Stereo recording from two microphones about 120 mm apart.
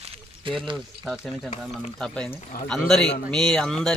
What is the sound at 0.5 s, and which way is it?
Speech, 45° right (ahead or behind).